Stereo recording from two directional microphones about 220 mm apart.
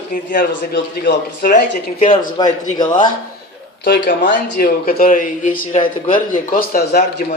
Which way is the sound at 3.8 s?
40° left (ahead or behind).